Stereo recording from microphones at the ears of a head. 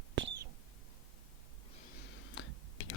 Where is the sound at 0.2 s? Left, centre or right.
Right.